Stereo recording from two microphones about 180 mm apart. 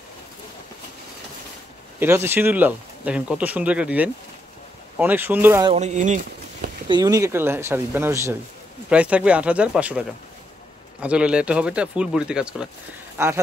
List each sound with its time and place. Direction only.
2.0 s speech: 15° right (ahead or behind)
5.8 s speech: 40° right (ahead or behind)
6.9 s speech: 20° right (ahead or behind); by 12.6 s 5° right (ahead or behind)